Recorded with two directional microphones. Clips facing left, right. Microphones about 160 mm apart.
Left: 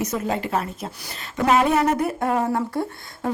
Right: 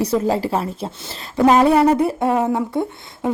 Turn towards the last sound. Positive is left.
turn(degrees=-20)  # may be behind; listen again after turning